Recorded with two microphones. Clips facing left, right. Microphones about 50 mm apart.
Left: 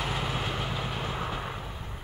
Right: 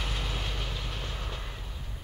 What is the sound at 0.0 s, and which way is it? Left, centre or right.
Train, centre.